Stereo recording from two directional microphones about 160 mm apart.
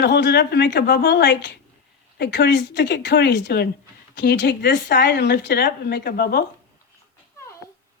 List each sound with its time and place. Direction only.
0.0 s speech: 90° left